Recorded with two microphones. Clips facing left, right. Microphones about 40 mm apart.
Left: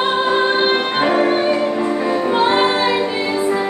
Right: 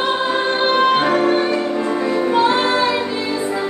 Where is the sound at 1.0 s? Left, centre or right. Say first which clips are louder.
Even; centre.